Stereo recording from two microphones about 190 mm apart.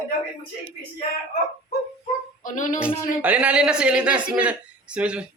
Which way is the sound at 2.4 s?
45° left (ahead or behind).